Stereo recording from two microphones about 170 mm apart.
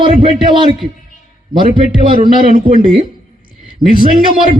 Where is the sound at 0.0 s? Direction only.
30° right (ahead or behind).